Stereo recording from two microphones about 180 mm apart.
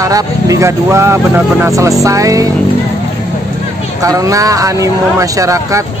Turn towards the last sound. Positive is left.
turn(degrees=-15)  # may be behind; listen again after turning